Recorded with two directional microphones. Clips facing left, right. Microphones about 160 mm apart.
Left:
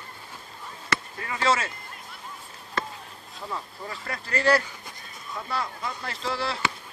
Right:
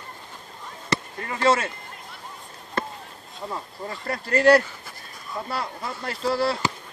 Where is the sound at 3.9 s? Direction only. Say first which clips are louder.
Right 7 dB; 45° right (ahead or behind).